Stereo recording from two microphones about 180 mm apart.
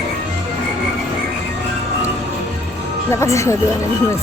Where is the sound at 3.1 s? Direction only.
15° left (ahead or behind).